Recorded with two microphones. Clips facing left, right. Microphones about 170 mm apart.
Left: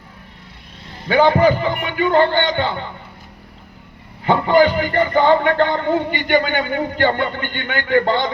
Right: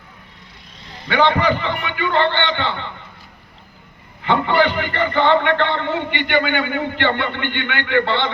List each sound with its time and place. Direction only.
1.1 s a man's voice: 40° left (ahead or behind)
4.2 s a man's voice: 40° left (ahead or behind)